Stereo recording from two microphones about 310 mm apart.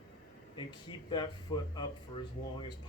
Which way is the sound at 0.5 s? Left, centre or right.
Centre.